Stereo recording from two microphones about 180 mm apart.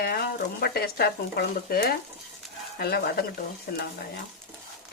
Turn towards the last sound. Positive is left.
turn(degrees=55)  # may be behind; listen again after turning